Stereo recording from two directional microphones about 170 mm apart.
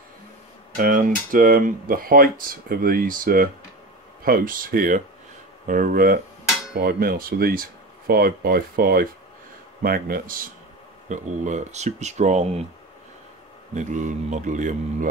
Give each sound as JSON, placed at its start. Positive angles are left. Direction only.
{"t": 0.7, "sound": "speech", "side_deg": -50}
{"t": 11.1, "sound": "speech", "side_deg": -45}
{"t": 13.7, "sound": "speech", "side_deg": -45}